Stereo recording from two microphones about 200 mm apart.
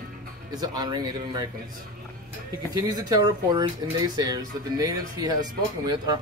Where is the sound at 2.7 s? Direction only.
20° right (ahead or behind).